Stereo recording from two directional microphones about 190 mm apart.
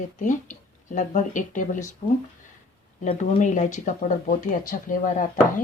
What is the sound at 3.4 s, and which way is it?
Speech, 40° left (ahead or behind).